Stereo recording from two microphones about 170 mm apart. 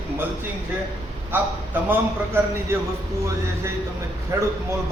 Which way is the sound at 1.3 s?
10° right (ahead or behind).